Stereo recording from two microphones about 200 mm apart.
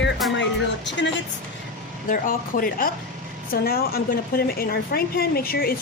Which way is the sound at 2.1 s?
45° left (ahead or behind).